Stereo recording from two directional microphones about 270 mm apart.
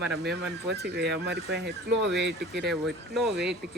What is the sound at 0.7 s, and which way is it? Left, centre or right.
Speech, right.